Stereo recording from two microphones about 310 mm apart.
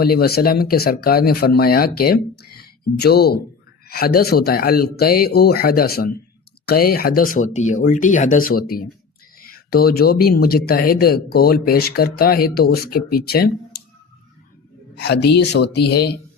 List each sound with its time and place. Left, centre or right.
0.0 s speech: left
14.9 s speech: left